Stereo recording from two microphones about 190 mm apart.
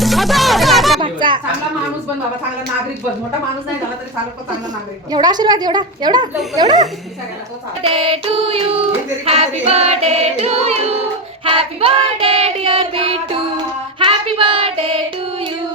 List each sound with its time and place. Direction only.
0.0 s music: centre (ahead or behind)
1.0 s a sound: 25° right (ahead or behind)
5.1 s child singing: 20° right (ahead or behind)
14.0 s female singing: 25° right (ahead or behind)